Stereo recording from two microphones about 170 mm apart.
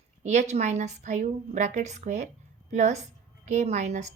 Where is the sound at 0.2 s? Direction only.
40° right (ahead or behind).